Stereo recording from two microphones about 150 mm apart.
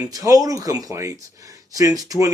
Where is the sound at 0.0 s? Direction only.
20° right (ahead or behind).